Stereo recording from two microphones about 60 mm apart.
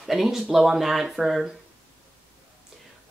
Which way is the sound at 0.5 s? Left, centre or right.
Centre.